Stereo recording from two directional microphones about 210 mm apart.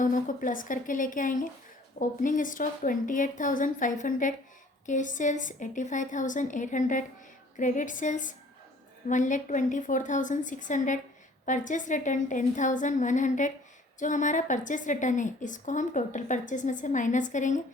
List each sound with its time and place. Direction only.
0.0 s a woman's voice: 40° left (ahead or behind)